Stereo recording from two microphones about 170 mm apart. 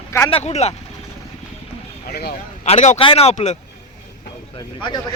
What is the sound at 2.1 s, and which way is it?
Speech, 70° left (ahead or behind).